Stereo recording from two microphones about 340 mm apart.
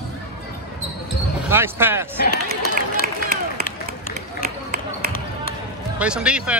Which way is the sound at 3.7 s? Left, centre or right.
Left.